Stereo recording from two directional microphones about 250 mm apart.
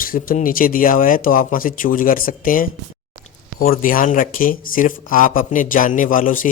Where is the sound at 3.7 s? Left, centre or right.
Left.